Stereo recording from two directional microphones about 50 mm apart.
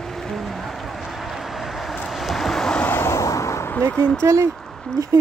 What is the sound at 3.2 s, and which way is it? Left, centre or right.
Vehicle, left.